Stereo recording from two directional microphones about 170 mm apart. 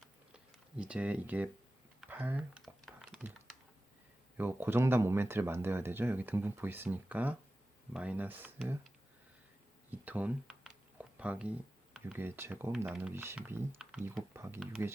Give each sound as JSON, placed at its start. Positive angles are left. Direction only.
{"t": 0.8, "sound": "speech", "side_deg": -5}
{"t": 2.0, "sound": "computer keyboard", "side_deg": -10}
{"t": 2.8, "sound": "typing", "side_deg": -5}
{"t": 4.4, "sound": "speech", "side_deg": -10}
{"t": 9.9, "sound": "speech", "side_deg": -10}
{"t": 13.8, "sound": "typing", "side_deg": -5}
{"t": 14.3, "sound": "speech", "side_deg": -15}